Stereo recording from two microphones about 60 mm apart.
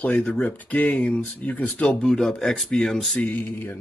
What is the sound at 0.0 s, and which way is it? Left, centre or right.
Speech, left.